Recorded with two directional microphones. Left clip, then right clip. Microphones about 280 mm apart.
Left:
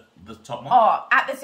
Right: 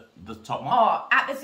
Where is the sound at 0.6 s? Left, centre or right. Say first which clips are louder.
Left 4 dB; centre.